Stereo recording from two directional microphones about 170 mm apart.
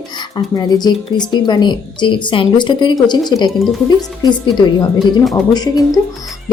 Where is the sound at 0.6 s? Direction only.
25° left (ahead or behind).